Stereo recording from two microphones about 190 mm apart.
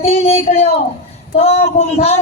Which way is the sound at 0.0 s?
35° left (ahead or behind).